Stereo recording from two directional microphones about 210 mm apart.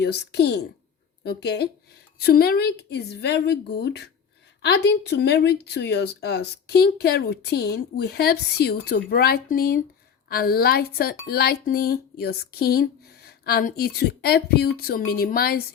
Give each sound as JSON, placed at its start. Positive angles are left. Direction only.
{"t": 0.0, "sound": "speech", "side_deg": 55}